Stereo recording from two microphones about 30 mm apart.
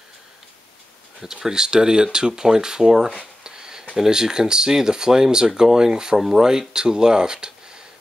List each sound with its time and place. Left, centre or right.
1.2 s speech: centre
3.2 s a sound: right
3.9 s speech: right